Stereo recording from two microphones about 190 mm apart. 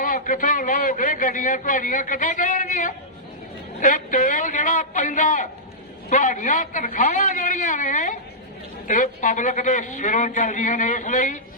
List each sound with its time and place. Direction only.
0.0 s a man's voice: 45° left (ahead or behind)